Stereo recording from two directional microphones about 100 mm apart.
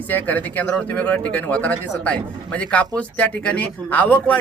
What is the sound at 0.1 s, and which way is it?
Speech, 15° left (ahead or behind).